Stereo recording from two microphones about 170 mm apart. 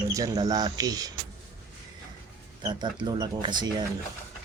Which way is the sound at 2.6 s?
25° right (ahead or behind).